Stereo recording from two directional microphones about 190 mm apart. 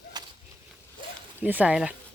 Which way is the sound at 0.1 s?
20° right (ahead or behind).